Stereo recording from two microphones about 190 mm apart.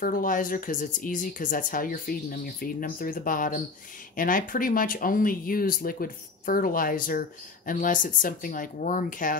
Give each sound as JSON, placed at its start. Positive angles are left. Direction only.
{"t": 0.0, "sound": "speech", "side_deg": 45}